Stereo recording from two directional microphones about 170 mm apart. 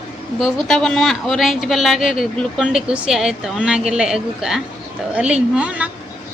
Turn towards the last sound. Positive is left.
turn(degrees=-5)  # may be behind; listen again after turning